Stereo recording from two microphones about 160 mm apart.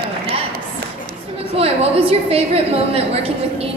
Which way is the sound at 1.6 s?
35° right (ahead or behind).